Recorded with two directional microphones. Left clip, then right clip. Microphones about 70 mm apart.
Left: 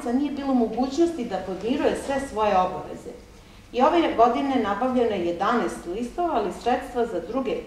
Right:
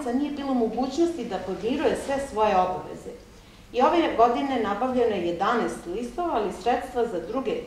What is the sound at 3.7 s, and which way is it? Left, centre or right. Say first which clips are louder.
A woman's voice: left 1 dB; centre.